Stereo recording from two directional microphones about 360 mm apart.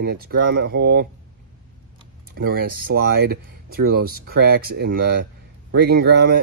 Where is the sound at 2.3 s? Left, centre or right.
Right.